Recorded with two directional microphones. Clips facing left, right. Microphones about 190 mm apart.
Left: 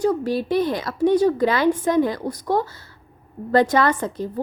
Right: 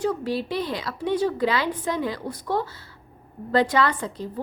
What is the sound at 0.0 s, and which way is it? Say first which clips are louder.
A woman's voice: left 4 dB; 45° left (ahead or behind).